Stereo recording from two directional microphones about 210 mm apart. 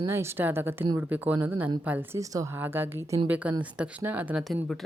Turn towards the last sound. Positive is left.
turn(degrees=0)  # may be behind; listen again after turning